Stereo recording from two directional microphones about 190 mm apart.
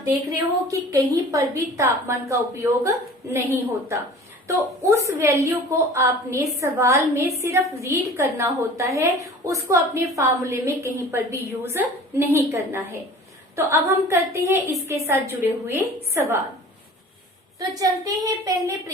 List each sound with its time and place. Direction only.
0.7 s a woman's voice: 15° right (ahead or behind)
17.6 s a woman's voice: 20° right (ahead or behind)